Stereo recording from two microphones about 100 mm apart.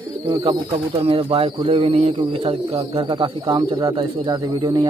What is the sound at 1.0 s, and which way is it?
Speech, 70° right (ahead or behind).